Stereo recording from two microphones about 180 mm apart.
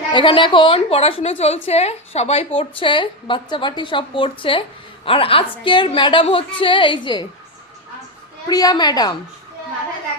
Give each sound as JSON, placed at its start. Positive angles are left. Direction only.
{"t": 0.1, "sound": "a woman's voice", "side_deg": 25}
{"t": 8.4, "sound": "a woman's voice", "side_deg": 20}